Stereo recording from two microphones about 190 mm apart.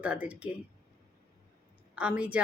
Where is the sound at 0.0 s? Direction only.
5° right (ahead or behind).